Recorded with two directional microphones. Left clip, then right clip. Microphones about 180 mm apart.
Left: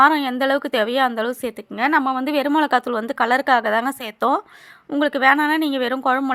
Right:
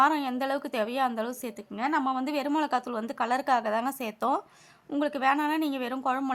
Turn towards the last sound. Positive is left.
turn(degrees=20)  # may be behind; listen again after turning